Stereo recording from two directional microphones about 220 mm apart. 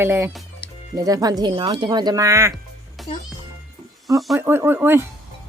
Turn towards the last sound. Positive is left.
turn(degrees=-10)  # may be behind; listen again after turning